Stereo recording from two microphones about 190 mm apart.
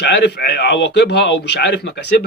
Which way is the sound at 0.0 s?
60° left (ahead or behind).